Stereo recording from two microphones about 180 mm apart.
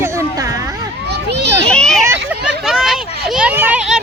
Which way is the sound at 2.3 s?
Centre (ahead or behind).